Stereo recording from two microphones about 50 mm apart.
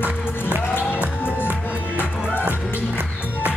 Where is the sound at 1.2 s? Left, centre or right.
Left.